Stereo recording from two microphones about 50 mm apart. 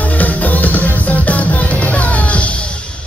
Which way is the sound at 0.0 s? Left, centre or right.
Left.